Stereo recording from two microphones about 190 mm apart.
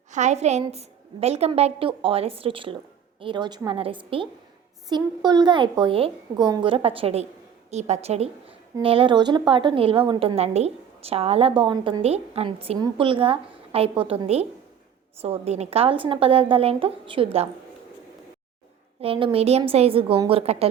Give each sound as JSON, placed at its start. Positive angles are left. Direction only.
{"t": 0.1, "sound": "a woman's voice", "side_deg": -35}
{"t": 19.0, "sound": "a woman's voice", "side_deg": -30}